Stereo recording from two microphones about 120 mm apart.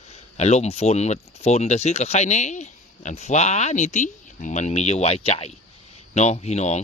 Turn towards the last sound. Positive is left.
turn(degrees=70)  # may be behind; listen again after turning